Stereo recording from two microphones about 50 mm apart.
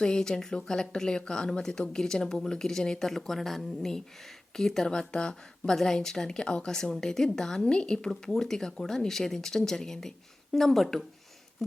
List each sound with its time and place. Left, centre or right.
0.0 s speech: centre